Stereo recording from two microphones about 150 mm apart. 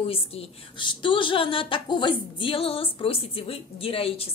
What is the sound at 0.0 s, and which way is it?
A woman's voice, 40° left (ahead or behind).